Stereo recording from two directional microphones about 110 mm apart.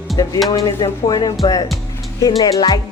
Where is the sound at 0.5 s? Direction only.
40° left (ahead or behind).